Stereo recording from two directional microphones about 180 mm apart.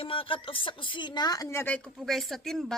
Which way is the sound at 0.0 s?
30° left (ahead or behind).